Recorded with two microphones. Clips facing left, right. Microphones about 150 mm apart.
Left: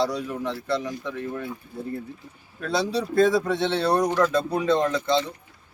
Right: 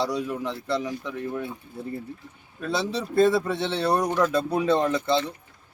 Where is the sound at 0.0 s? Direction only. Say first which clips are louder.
Left 1 dB; 10° right (ahead or behind).